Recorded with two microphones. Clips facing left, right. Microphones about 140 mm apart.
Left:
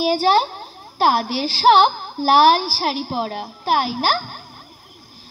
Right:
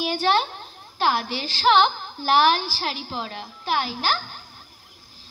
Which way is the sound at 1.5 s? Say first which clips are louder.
Left 5 dB; 40° left (ahead or behind).